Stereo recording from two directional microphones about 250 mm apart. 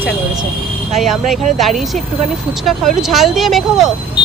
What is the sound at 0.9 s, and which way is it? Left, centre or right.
Speech, centre.